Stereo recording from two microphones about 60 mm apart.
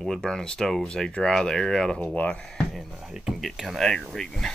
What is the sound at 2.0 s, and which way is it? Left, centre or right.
Speech, left.